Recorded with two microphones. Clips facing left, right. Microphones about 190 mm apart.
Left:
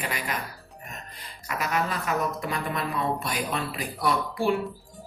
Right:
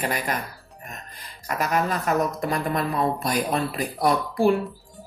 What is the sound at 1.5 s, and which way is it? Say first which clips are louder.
A woman's voice: right 4 dB; 45° right (ahead or behind).